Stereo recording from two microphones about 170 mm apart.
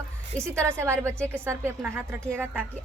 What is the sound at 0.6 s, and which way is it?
A woman's voice, 15° right (ahead or behind).